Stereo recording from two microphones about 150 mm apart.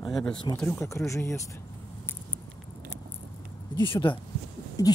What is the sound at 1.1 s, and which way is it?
Speech, 20° left (ahead or behind).